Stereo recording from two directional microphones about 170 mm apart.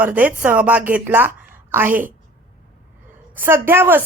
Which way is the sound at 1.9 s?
55° right (ahead or behind).